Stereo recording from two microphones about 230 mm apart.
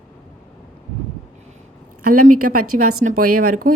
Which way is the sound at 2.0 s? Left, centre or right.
Right.